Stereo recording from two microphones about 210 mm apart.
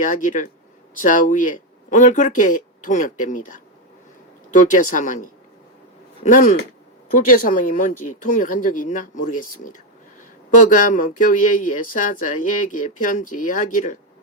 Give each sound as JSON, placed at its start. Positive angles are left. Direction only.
{"t": 0.0, "sound": "speech", "side_deg": 35}
{"t": 6.2, "sound": "speech", "side_deg": 40}